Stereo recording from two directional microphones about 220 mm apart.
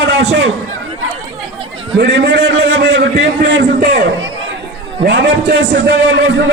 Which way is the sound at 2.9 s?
30° right (ahead or behind).